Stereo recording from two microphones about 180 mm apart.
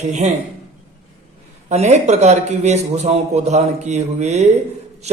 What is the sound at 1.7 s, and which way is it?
A man's voice, 40° right (ahead or behind).